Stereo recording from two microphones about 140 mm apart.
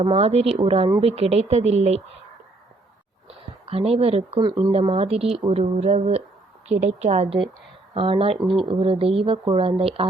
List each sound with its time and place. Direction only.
0.0 s speech: 45° right (ahead or behind)
3.2 s speech: 45° right (ahead or behind)